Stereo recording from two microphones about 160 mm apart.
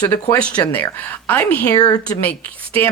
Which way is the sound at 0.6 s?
20° left (ahead or behind).